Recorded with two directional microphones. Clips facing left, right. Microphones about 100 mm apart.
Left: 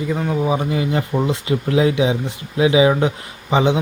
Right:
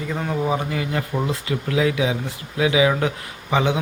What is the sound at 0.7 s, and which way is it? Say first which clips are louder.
Speech: left 5 dB; 20° left (ahead or behind).